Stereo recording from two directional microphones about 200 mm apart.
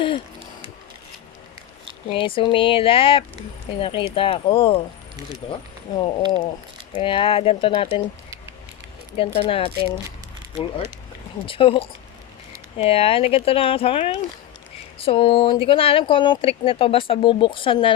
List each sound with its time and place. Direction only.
2.0 s speech: 25° left (ahead or behind)
9.1 s speech: 25° left (ahead or behind)
11.4 s speech: 25° left (ahead or behind)